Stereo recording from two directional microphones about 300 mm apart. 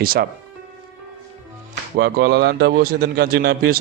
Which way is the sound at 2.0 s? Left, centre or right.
Right.